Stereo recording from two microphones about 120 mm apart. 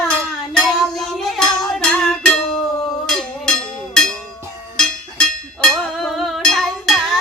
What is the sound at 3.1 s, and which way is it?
Cowbell, 5° left (ahead or behind).